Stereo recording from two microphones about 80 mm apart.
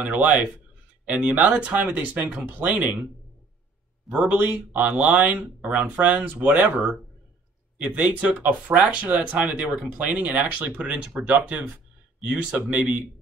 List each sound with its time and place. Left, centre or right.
0.0 s speech: centre
4.1 s speech: centre
7.7 s speech: centre